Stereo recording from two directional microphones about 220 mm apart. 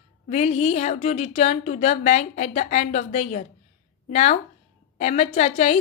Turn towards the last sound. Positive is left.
turn(degrees=30)  # may be behind; listen again after turning